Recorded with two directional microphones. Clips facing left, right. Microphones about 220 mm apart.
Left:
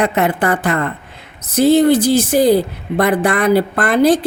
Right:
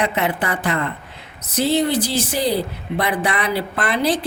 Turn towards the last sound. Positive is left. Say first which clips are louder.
# left 7 dB
turn(degrees=50)  # may be behind; listen again after turning